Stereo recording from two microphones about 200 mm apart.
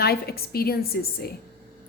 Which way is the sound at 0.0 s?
50° left (ahead or behind).